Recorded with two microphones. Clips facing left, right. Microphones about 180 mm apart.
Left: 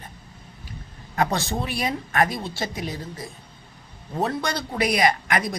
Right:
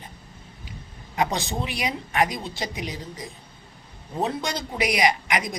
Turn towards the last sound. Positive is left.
turn(degrees=-15)  # may be behind; listen again after turning